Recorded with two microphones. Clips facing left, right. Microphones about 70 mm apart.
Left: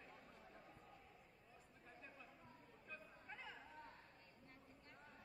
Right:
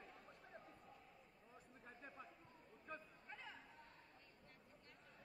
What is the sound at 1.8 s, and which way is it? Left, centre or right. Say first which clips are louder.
Chatter: right 3 dB; right.